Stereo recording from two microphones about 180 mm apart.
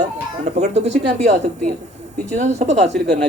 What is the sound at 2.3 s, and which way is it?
Speech, 40° right (ahead or behind).